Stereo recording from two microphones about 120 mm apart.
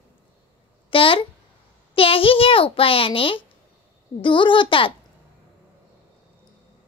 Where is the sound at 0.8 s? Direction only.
45° left (ahead or behind).